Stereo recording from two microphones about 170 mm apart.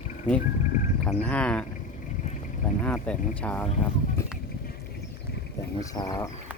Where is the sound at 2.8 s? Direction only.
5° left (ahead or behind).